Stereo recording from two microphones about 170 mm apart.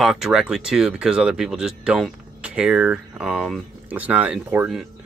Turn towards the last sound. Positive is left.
turn(degrees=-5)  # may be behind; listen again after turning